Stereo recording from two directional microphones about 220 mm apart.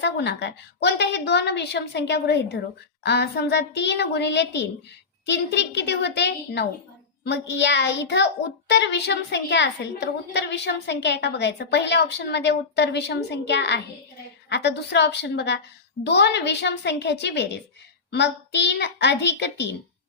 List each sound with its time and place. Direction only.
0.0 s a child's voice: 50° left (ahead or behind)